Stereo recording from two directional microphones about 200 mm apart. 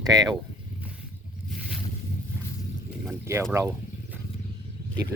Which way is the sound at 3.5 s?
15° right (ahead or behind).